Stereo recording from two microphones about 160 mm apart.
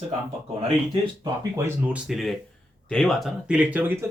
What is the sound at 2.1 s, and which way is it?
Speech, centre (ahead or behind).